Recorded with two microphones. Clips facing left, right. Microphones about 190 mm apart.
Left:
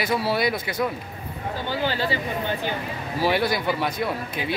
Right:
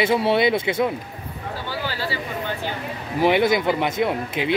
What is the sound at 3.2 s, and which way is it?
Speech, 20° right (ahead or behind).